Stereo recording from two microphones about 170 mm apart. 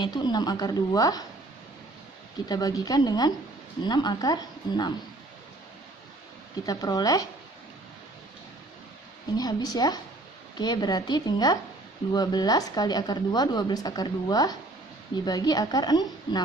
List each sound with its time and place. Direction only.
0.0 s a woman's voice: 25° left (ahead or behind)
2.5 s a woman's voice: 20° left (ahead or behind)
6.7 s a woman's voice: 20° left (ahead or behind)
9.4 s a woman's voice: 25° left (ahead or behind)